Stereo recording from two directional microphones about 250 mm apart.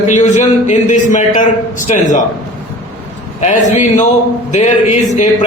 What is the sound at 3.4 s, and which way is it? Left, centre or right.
A man's voice, left.